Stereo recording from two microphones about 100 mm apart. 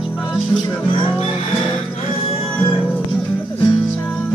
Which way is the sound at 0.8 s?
60° left (ahead or behind).